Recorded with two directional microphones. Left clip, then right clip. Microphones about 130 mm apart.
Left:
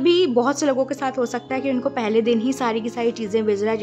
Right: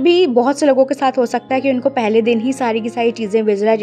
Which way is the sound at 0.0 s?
20° right (ahead or behind).